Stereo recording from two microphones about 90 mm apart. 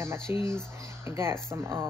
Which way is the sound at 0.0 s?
30° right (ahead or behind).